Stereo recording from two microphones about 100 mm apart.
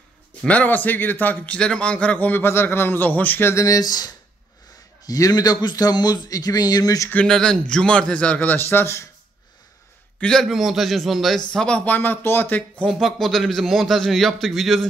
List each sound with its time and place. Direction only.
0.4 s a man's voice: 15° left (ahead or behind)
3.6 s a man's voice: 40° left (ahead or behind)
7.2 s a man's voice: 5° left (ahead or behind); by 9.0 s 25° left (ahead or behind)
10.2 s a man's voice: 5° left (ahead or behind)
12.8 s a man's voice: centre (ahead or behind)